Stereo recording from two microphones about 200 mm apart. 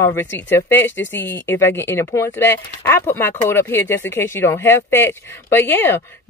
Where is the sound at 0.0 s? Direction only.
10° left (ahead or behind).